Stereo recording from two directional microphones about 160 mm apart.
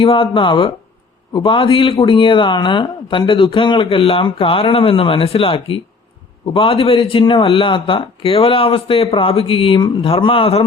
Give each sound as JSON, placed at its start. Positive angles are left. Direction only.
{"t": 0.0, "sound": "speech", "side_deg": 30}